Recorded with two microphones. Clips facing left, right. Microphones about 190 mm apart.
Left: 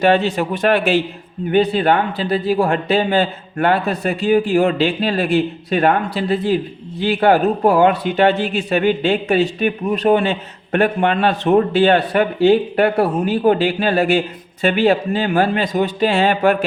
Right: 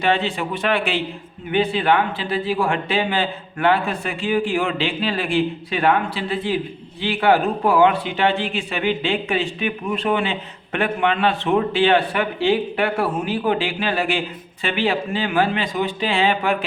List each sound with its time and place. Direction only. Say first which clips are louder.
0.0 s a man's voice: left 6 dB; 40° left (ahead or behind)